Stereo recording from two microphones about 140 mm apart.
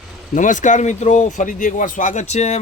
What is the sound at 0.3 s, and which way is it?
Speech, 65° left (ahead or behind).